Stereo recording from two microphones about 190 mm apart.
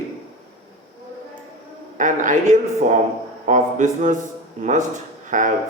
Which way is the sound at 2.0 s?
40° right (ahead or behind).